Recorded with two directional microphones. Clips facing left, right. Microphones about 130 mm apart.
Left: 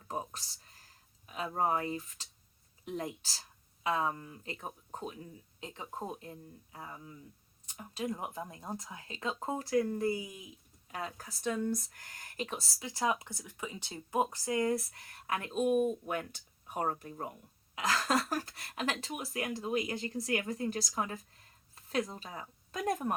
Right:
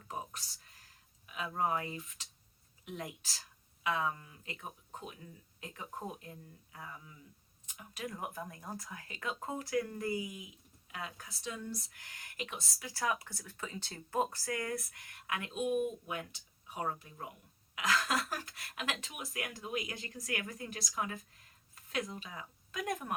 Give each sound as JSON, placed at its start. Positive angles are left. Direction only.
{"t": 0.1, "sound": "a sound", "side_deg": 30}
{"t": 1.3, "sound": "speech", "side_deg": 35}
{"t": 5.5, "sound": "speech", "side_deg": 25}
{"t": 10.8, "sound": "speech", "side_deg": 35}
{"t": 11.4, "sound": "speech", "side_deg": 50}
{"t": 12.8, "sound": "speech", "side_deg": 20}
{"t": 17.7, "sound": "speech", "side_deg": 25}
{"t": 18.3, "sound": "speech", "side_deg": 40}